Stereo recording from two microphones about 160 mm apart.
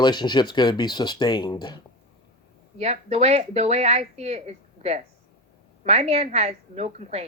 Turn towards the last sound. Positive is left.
turn(degrees=-40)  # may be behind; listen again after turning